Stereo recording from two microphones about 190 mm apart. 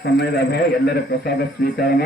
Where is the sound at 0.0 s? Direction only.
60° left (ahead or behind).